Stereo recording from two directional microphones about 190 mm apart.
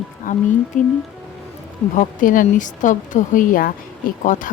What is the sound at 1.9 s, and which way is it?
Speech, 45° left (ahead or behind).